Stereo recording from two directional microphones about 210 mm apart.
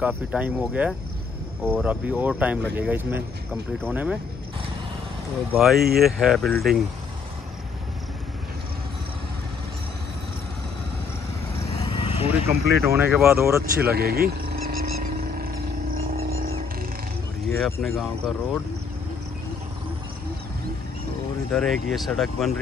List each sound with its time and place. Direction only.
0.0 s speech: 5° right (ahead or behind)
1.6 s speech: 5° left (ahead or behind)
1.9 s speech: 5° right (ahead or behind)
5.5 s speech: centre (ahead or behind)
11.8 s vehicle: 25° left (ahead or behind)
12.4 s speech: 5° right (ahead or behind)
13.8 s a sound: 45° right (ahead or behind)
16.2 s music: 30° right (ahead or behind)
17.8 s speech: centre (ahead or behind)
21.5 s speech: centre (ahead or behind)